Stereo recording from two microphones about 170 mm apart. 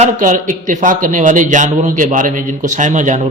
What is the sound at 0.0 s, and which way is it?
A man's voice, 50° right (ahead or behind).